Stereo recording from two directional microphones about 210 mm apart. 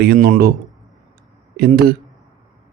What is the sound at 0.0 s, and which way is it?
Speech, 50° right (ahead or behind).